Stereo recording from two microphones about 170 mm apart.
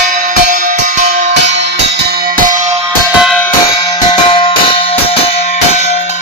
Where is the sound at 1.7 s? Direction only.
65° right (ahead or behind).